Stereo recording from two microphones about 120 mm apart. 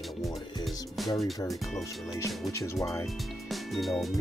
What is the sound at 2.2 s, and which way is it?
Speech, 25° left (ahead or behind).